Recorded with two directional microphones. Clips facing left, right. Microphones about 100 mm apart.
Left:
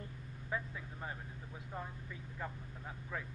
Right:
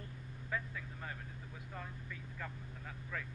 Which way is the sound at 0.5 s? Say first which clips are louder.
Left 1 dB; 25° left (ahead or behind).